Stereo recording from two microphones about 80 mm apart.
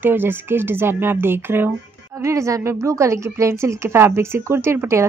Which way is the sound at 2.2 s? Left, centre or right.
Right.